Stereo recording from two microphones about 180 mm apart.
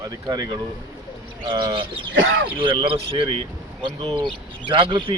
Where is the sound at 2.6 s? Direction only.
30° right (ahead or behind).